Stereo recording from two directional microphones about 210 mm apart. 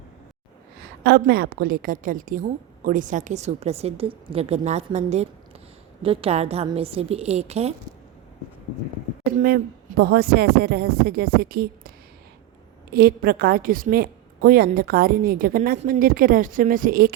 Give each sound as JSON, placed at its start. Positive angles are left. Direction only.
{"t": 1.0, "sound": "a woman's voice", "side_deg": -45}
{"t": 9.2, "sound": "a woman's voice", "side_deg": -45}
{"t": 12.9, "sound": "a woman's voice", "side_deg": -45}